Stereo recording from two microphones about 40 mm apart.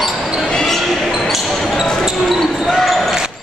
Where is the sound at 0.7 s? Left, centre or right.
Centre.